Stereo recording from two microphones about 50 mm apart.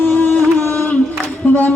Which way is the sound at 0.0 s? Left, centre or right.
Left.